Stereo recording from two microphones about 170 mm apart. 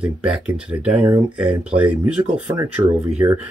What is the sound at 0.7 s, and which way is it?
Speech, 5° right (ahead or behind).